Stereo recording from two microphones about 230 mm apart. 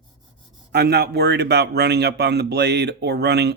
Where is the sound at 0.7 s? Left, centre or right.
Right.